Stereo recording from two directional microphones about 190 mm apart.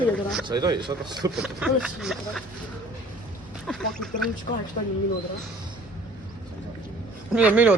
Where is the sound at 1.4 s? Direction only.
5° right (ahead or behind).